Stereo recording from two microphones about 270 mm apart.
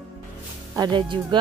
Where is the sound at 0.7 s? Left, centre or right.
Centre.